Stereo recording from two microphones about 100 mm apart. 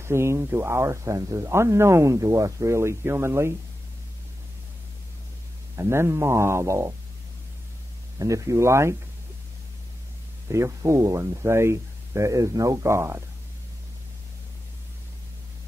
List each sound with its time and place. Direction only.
0.0 s speech: 25° right (ahead or behind)
5.8 s speech: 25° right (ahead or behind)
8.2 s speech: 30° right (ahead or behind)
10.5 s speech: 30° right (ahead or behind)